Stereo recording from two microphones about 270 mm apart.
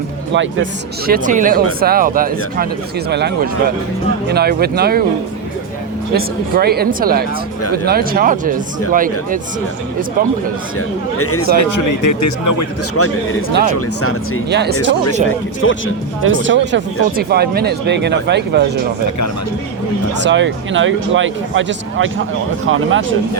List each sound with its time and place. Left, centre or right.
0.3 s speech: right
6.1 s speech: right
10.8 s speech: left
11.6 s speech: left
13.0 s speech: left
14.5 s speech: right
15.6 s speech: left
16.2 s speech: right
20.2 s speech: right